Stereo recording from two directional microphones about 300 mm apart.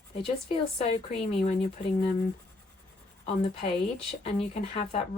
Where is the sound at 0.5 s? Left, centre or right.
Centre.